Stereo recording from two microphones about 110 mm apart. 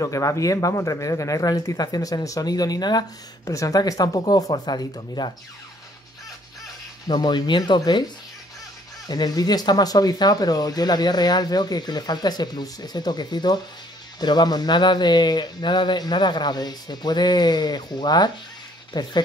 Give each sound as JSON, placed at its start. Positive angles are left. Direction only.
{"t": 0.0, "sound": "speech", "side_deg": 30}
{"t": 7.1, "sound": "speech", "side_deg": 40}
{"t": 9.0, "sound": "speech", "side_deg": 35}